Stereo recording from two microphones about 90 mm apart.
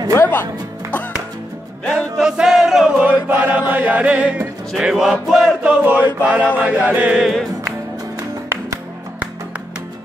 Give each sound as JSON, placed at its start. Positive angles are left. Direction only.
{"t": 0.1, "sound": "speech", "side_deg": 25}
{"t": 2.0, "sound": "music", "side_deg": -10}
{"t": 3.1, "sound": "music", "side_deg": -20}